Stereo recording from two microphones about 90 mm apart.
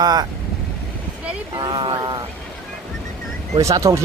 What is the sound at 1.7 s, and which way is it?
Speech, 55° right (ahead or behind).